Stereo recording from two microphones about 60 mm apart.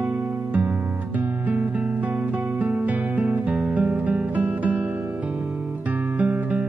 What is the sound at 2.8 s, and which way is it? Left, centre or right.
Music, right.